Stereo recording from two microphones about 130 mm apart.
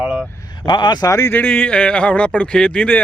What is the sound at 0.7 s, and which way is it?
Speech, 35° left (ahead or behind).